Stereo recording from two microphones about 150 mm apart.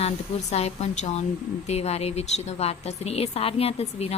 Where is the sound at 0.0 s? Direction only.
45° left (ahead or behind).